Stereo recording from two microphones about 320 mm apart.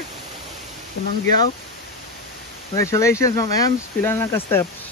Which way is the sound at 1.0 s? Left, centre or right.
Left.